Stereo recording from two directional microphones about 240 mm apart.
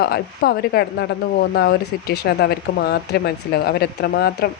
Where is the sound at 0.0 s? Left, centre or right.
Left.